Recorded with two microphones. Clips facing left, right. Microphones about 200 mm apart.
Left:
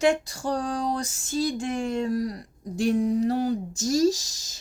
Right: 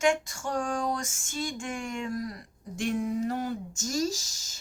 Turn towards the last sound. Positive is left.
turn(degrees=35)  # may be behind; listen again after turning